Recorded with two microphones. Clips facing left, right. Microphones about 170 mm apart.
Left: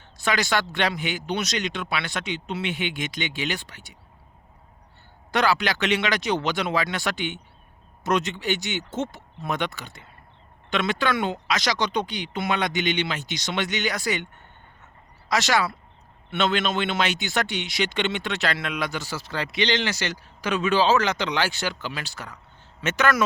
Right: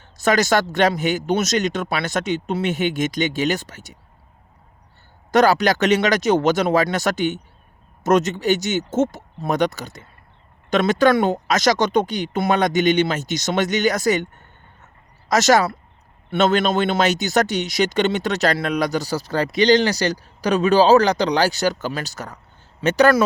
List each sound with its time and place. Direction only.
0.0 s speech: 45° right (ahead or behind)
5.3 s speech: 40° right (ahead or behind)